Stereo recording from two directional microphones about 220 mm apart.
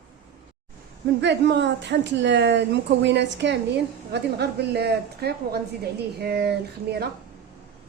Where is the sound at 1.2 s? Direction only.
50° right (ahead or behind).